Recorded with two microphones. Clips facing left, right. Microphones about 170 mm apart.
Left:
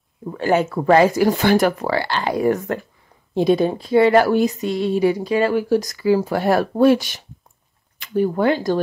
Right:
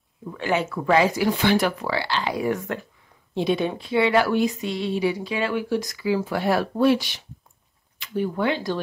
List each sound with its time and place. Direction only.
0.2 s a woman's voice: 40° left (ahead or behind)